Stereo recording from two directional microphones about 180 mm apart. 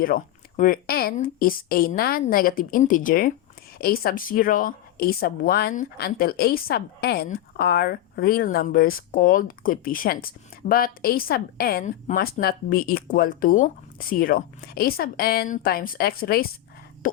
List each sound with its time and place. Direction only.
0.0 s a woman's voice: 50° left (ahead or behind)